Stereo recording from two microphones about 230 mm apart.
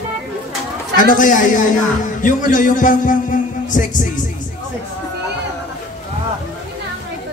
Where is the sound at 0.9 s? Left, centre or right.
Left.